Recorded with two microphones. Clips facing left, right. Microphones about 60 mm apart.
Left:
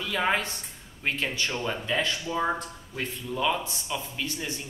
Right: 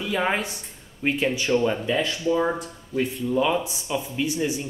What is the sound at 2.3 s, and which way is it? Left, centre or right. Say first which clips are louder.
Speech: right 6 dB; centre.